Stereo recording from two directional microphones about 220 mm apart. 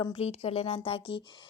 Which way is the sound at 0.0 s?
25° left (ahead or behind).